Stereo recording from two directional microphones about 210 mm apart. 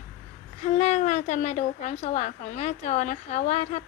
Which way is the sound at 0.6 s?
30° left (ahead or behind).